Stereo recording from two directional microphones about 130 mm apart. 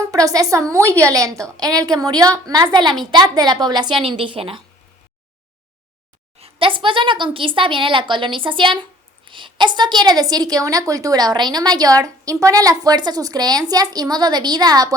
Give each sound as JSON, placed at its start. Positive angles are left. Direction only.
{"t": 0.1, "sound": "a woman's voice", "side_deg": -25}
{"t": 6.4, "sound": "a woman's voice", "side_deg": -45}